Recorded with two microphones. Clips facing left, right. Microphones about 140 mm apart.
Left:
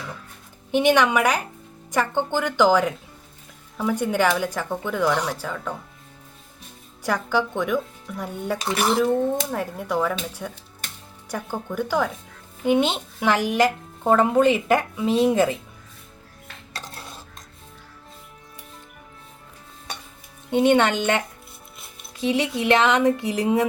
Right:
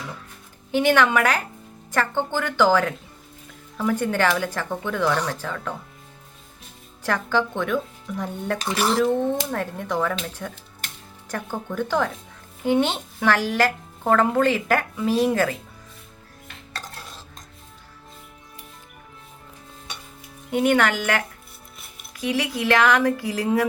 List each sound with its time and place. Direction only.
0.7 s speech: 15° left (ahead or behind)
7.0 s speech: 10° left (ahead or behind)
20.5 s speech: 25° left (ahead or behind)